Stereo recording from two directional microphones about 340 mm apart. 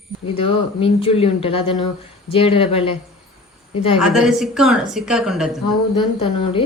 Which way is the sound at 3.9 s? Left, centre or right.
Centre.